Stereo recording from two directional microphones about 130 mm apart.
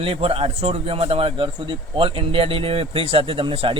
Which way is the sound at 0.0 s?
45° right (ahead or behind).